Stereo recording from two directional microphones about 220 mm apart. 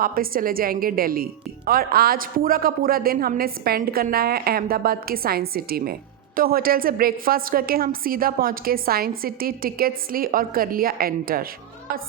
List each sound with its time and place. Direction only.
0.0 s a woman's voice: 40° right (ahead or behind)